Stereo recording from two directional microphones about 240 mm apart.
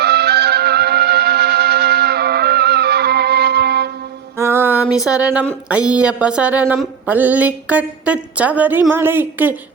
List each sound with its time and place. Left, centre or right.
0.0 s music: right
4.4 s music: centre
4.9 s a sound: centre
8.9 s speech: centre